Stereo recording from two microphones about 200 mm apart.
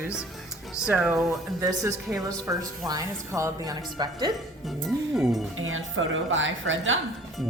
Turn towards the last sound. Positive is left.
turn(degrees=-75)  # may be behind; listen again after turning